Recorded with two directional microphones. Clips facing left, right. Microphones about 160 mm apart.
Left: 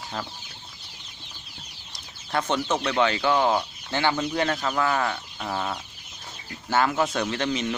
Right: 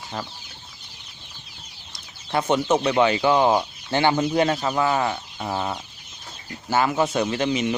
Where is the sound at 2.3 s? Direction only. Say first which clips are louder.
Right 5 dB; 10° right (ahead or behind).